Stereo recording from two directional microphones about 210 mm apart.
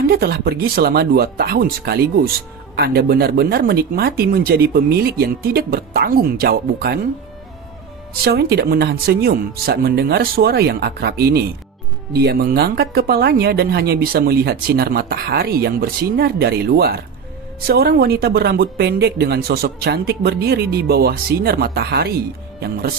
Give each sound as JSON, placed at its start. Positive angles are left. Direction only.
{"t": 0.1, "sound": "speech", "side_deg": -50}
{"t": 8.2, "sound": "speech", "side_deg": -50}